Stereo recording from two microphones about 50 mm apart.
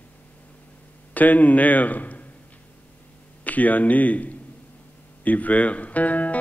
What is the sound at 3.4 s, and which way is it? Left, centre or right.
Speech, left.